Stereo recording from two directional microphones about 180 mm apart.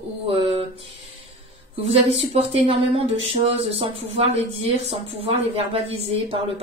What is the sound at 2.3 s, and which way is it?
Speech, 35° right (ahead or behind).